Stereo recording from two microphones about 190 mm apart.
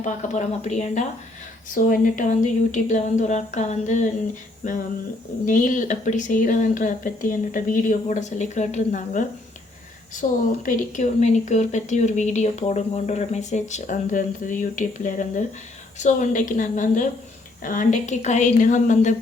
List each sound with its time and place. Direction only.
0.0 s speech: 40° left (ahead or behind)
10.2 s speech: 40° left (ahead or behind)